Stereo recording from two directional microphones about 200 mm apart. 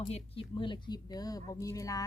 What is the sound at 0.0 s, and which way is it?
Speech, 30° left (ahead or behind).